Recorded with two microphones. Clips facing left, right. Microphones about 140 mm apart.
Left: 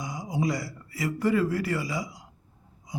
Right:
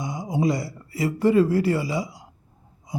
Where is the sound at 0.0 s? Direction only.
25° right (ahead or behind).